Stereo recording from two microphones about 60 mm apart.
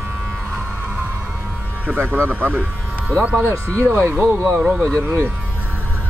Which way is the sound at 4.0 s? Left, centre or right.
Right.